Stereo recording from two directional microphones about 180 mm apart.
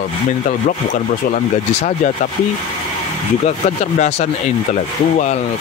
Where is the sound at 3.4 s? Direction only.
40° left (ahead or behind).